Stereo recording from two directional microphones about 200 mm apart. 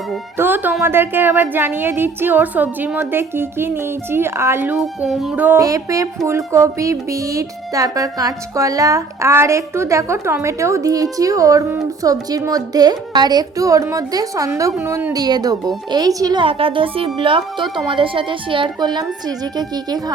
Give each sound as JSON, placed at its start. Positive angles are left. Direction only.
{"t": 0.3, "sound": "speech", "side_deg": -10}